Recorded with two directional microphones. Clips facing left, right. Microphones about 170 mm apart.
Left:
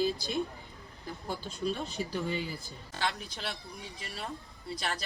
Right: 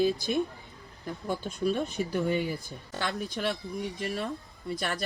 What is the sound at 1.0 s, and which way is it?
Speech, 55° right (ahead or behind).